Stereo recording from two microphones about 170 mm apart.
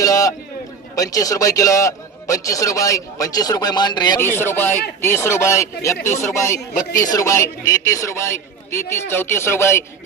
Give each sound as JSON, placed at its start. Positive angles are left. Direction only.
{"t": 0.0, "sound": "a sound", "side_deg": 20}
{"t": 0.9, "sound": "a man's voice", "side_deg": 20}
{"t": 4.2, "sound": "a man's voice", "side_deg": 15}